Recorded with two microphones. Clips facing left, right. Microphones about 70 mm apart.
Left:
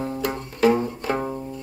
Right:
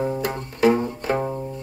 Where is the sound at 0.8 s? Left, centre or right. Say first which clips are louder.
Right 1 dB; right.